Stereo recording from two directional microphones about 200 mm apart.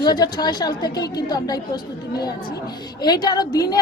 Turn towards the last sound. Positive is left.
turn(degrees=20)  # may be behind; listen again after turning